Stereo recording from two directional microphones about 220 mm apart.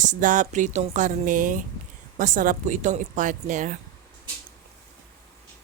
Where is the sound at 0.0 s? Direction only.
35° right (ahead or behind).